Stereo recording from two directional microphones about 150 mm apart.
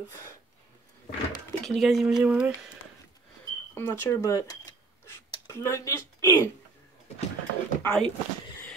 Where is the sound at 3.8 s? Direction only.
15° left (ahead or behind).